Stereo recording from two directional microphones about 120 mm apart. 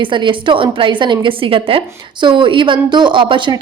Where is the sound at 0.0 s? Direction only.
45° right (ahead or behind).